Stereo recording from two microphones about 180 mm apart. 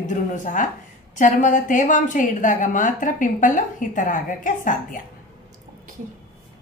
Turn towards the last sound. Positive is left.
turn(degrees=45)  # may be behind; listen again after turning